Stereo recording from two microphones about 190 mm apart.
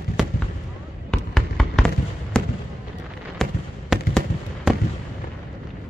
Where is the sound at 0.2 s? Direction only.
Centre (ahead or behind).